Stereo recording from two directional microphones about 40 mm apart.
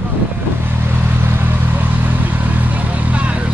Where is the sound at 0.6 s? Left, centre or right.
Right.